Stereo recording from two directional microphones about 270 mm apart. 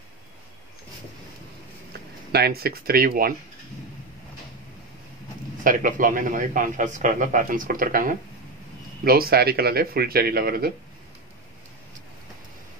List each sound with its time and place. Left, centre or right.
2.3 s speech: right
5.6 s a man's voice: right